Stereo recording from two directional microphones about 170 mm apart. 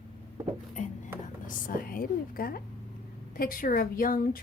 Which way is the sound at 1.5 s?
55° left (ahead or behind).